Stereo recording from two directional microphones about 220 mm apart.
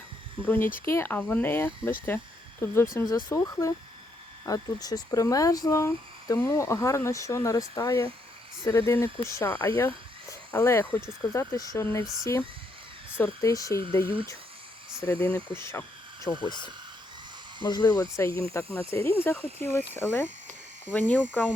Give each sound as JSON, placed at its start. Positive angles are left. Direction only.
{"t": 0.4, "sound": "speech", "side_deg": 10}
{"t": 15.0, "sound": "speech", "side_deg": 10}
{"t": 15.5, "sound": "a sound", "side_deg": 10}
{"t": 16.4, "sound": "speech", "side_deg": 20}